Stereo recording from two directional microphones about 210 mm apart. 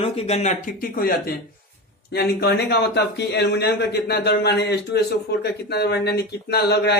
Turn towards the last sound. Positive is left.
turn(degrees=50)  # may be behind; listen again after turning